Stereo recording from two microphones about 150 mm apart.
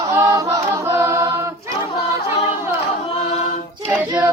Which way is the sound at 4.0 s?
10° right (ahead or behind).